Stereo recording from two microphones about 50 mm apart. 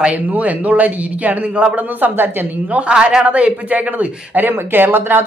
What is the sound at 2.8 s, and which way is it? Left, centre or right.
Speech, right.